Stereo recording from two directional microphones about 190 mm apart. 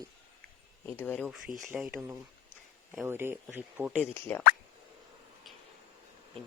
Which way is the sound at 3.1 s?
10° right (ahead or behind).